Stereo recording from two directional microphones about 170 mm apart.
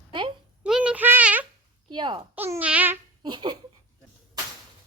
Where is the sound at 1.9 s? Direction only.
25° right (ahead or behind).